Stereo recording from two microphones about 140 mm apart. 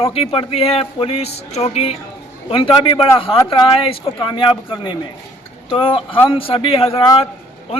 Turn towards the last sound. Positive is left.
turn(degrees=45)  # may be behind; listen again after turning